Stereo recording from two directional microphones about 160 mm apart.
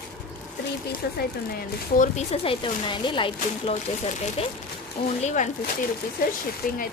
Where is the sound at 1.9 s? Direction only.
55° left (ahead or behind).